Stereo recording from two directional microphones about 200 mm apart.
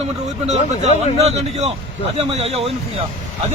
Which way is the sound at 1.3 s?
30° right (ahead or behind).